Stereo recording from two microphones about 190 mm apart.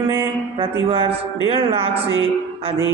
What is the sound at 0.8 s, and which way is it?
Speech, 30° right (ahead or behind).